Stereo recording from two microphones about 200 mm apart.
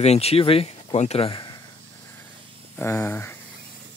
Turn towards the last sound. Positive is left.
turn(degrees=10)  # may be behind; listen again after turning